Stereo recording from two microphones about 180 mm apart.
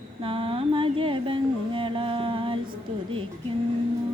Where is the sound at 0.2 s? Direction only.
30° right (ahead or behind).